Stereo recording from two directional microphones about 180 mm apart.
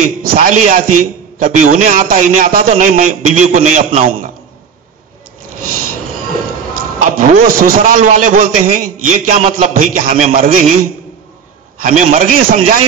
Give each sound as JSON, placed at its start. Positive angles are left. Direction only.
{"t": 0.2, "sound": "a man's voice", "side_deg": -55}
{"t": 6.7, "sound": "a man's voice", "side_deg": -50}
{"t": 11.8, "sound": "a man's voice", "side_deg": -45}